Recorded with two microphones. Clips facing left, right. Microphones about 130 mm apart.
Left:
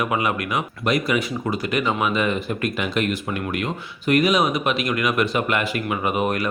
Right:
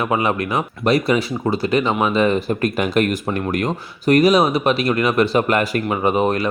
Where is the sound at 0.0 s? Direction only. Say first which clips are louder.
Right 3 dB; 30° right (ahead or behind).